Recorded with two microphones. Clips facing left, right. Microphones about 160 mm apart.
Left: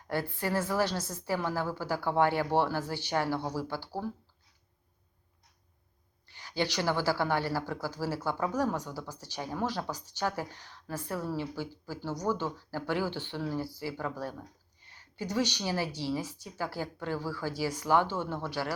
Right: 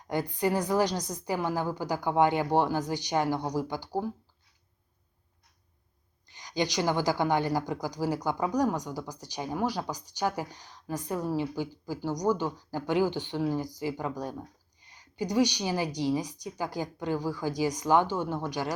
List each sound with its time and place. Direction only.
0.1 s speech: 15° right (ahead or behind)
6.2 s speech: 15° right (ahead or behind)